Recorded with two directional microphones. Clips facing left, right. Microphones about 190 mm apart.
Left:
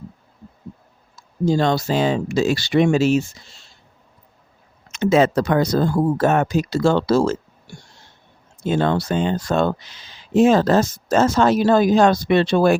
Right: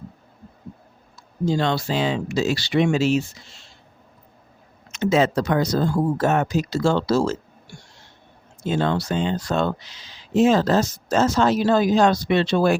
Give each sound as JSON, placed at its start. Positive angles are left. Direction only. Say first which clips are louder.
{"t": 1.1, "sound": "speech", "louder": "left 3 dB", "side_deg": 45}
{"t": 4.9, "sound": "speech", "louder": "left 3 dB", "side_deg": 55}
{"t": 8.6, "sound": "speech", "louder": "left 3 dB", "side_deg": 50}